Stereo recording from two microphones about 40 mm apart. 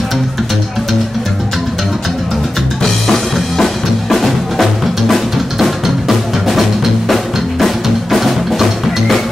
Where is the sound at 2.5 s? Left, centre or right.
Centre.